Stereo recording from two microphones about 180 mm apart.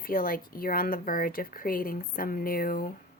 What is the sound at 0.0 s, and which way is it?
Speech, 50° left (ahead or behind).